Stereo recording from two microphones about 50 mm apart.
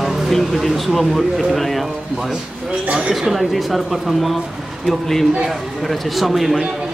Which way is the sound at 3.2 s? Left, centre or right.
Centre.